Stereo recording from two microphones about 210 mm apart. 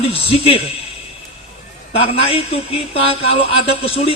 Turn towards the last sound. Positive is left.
turn(degrees=25)  # may be behind; listen again after turning